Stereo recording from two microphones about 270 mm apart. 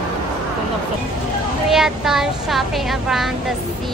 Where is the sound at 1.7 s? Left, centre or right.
Centre.